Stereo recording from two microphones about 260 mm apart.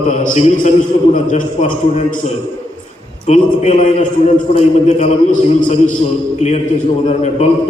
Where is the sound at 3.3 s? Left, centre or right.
Left.